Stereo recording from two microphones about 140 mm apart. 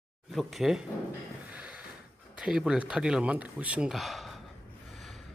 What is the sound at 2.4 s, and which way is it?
A man's voice, 5° right (ahead or behind).